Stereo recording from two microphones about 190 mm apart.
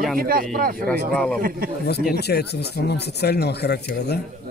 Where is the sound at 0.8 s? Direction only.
5° left (ahead or behind).